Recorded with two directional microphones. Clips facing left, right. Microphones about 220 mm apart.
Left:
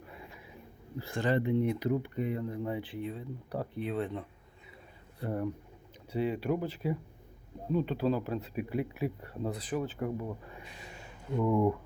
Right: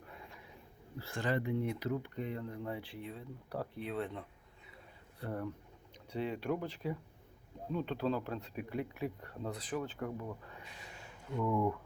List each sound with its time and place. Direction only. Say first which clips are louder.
0.0 s a sound: left 4 dB; 5° left (ahead or behind)
0.9 s speech: left 5 dB; 20° left (ahead or behind)
5.2 s speech: left 6 dB; 15° left (ahead or behind)
11.3 s speech: left 6 dB; 25° left (ahead or behind)